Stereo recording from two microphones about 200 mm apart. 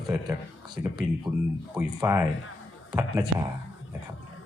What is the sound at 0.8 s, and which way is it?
Speech, 10° right (ahead or behind).